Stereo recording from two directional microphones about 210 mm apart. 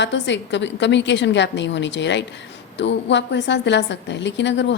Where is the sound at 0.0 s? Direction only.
60° left (ahead or behind).